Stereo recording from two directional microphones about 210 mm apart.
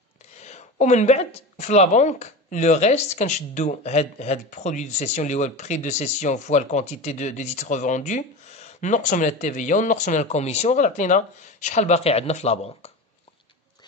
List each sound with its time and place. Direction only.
0.4 s speech: 35° left (ahead or behind)